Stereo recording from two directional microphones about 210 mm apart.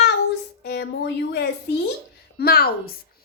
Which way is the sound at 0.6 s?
50° left (ahead or behind).